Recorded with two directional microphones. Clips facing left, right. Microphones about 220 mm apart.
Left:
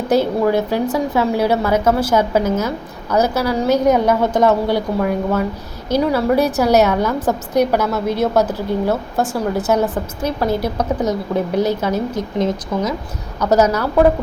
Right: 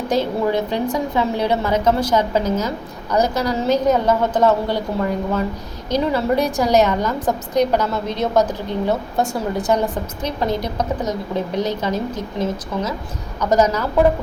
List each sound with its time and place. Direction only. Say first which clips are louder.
0.1 s a woman's voice: left 4 dB; 10° left (ahead or behind)